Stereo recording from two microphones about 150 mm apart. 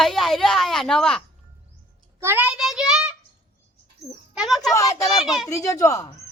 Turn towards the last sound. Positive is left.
turn(degrees=20)  # may be behind; listen again after turning